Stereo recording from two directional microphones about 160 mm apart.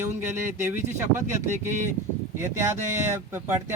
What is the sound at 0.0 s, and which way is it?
Speech, 15° right (ahead or behind).